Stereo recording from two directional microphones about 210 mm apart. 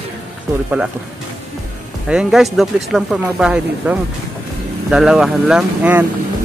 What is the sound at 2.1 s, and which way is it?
Speech, centre (ahead or behind).